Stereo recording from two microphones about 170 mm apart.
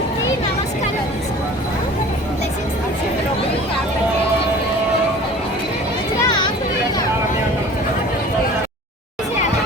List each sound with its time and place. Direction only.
6.2 s chatter: 25° left (ahead or behind)